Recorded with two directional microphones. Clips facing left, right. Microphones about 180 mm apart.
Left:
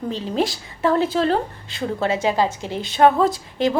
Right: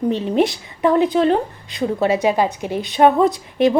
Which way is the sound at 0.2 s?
25° right (ahead or behind).